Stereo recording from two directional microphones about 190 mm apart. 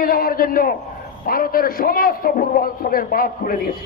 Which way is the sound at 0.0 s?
50° left (ahead or behind).